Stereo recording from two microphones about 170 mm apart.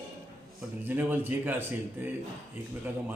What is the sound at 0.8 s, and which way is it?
A man's voice, 10° right (ahead or behind).